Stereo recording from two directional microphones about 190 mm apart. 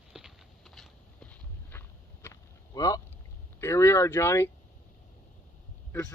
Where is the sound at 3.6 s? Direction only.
15° left (ahead or behind).